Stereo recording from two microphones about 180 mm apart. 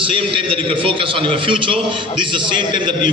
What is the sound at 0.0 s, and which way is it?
A man's voice, 30° right (ahead or behind).